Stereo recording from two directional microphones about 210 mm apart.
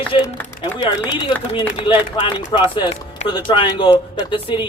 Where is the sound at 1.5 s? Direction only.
25° left (ahead or behind).